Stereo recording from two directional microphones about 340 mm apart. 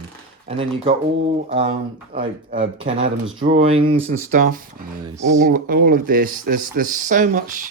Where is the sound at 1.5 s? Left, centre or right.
Centre.